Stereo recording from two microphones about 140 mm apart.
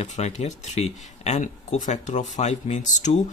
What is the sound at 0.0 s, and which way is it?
Speech, 50° left (ahead or behind).